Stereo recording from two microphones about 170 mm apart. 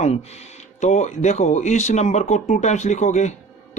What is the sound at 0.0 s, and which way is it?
Speech, 40° left (ahead or behind).